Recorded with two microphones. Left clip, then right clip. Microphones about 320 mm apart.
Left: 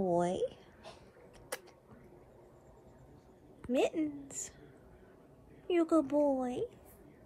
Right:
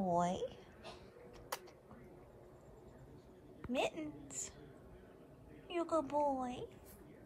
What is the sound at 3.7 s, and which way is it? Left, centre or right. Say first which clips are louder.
Speech: left 7 dB; centre.